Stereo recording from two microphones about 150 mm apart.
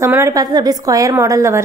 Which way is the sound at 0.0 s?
20° right (ahead or behind).